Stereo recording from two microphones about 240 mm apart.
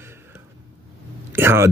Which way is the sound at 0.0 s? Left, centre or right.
Centre.